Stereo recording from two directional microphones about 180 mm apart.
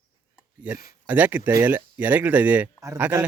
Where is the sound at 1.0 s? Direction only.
10° right (ahead or behind).